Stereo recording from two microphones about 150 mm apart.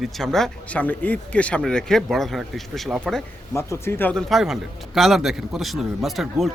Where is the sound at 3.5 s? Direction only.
15° left (ahead or behind).